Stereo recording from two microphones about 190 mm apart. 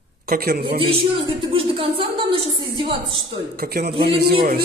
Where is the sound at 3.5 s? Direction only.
55° right (ahead or behind).